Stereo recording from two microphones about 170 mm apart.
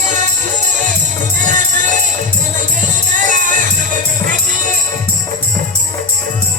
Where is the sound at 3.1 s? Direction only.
50° right (ahead or behind).